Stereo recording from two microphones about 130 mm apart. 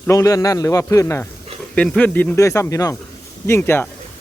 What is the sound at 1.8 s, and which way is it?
Speech, 10° left (ahead or behind).